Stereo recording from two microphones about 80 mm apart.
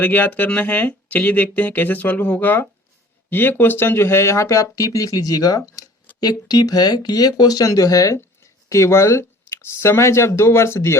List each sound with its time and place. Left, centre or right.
0.0 s speech: left